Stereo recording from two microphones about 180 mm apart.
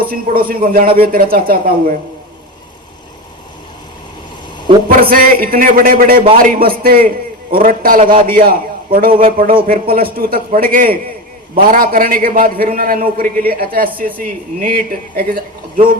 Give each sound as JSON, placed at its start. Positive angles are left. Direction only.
{"t": 0.0, "sound": "a man's voice", "side_deg": -55}
{"t": 4.9, "sound": "a man's voice", "side_deg": -55}